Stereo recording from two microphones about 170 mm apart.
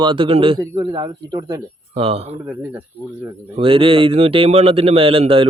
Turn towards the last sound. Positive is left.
turn(degrees=-35)  # may be behind; listen again after turning